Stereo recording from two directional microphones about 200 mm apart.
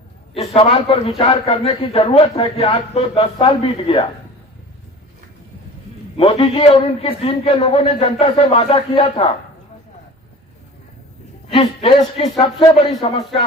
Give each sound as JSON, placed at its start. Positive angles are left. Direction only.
{"t": 0.5, "sound": "speech", "side_deg": 25}
{"t": 6.1, "sound": "speech", "side_deg": 25}
{"t": 11.4, "sound": "speech", "side_deg": 30}